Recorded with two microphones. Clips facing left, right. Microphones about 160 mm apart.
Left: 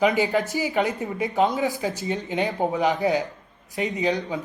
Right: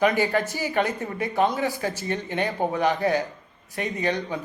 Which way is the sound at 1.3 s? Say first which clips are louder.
Left 1 dB; 20° left (ahead or behind).